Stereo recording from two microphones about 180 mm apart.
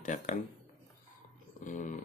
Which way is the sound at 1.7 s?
45° left (ahead or behind).